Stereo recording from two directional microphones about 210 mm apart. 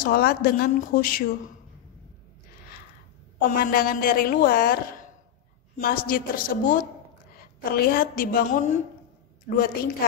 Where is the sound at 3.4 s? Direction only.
45° left (ahead or behind).